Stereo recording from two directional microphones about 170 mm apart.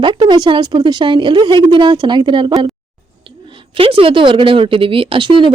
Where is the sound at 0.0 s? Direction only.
25° right (ahead or behind).